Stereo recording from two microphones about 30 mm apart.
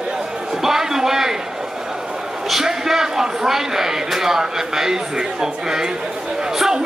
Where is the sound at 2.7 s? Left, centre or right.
Centre.